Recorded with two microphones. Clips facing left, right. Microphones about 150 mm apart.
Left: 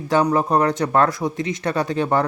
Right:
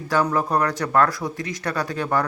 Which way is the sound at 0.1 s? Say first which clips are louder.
Left 3 dB; 20° left (ahead or behind).